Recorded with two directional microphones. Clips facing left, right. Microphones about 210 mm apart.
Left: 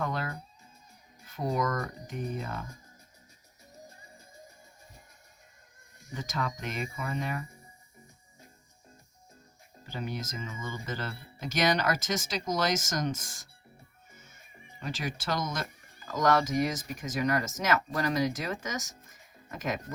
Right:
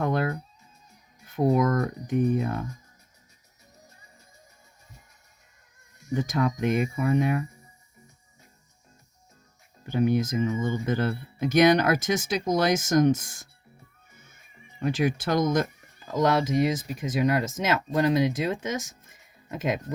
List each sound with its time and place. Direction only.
0.0 s music: 55° right (ahead or behind)
1.4 s speech: 55° right (ahead or behind)
6.1 s speech: 50° right (ahead or behind)
9.8 s speech: 55° right (ahead or behind)
14.8 s speech: 55° right (ahead or behind)
16.0 s speech: 30° right (ahead or behind)